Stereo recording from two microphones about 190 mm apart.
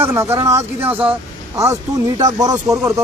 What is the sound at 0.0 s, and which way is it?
A man's voice, 10° right (ahead or behind).